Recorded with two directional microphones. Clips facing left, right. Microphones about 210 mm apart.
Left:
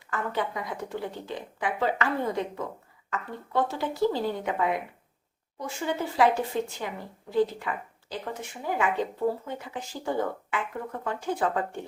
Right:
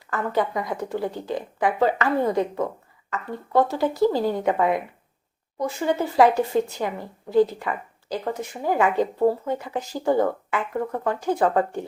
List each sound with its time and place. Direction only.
0.1 s speech: 40° right (ahead or behind)